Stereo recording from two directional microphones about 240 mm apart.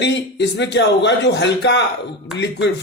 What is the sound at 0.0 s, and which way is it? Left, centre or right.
A man's voice, left.